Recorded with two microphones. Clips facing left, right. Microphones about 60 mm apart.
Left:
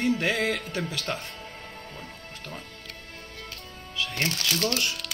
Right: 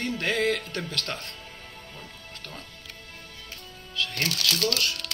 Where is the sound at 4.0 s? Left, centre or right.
Centre.